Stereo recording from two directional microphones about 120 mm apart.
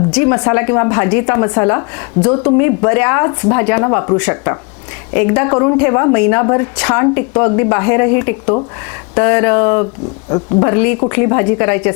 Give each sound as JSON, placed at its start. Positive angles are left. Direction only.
{"t": 0.2, "sound": "a woman's voice", "side_deg": 25}